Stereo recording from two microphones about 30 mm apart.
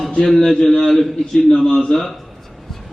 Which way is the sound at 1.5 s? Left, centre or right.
Left.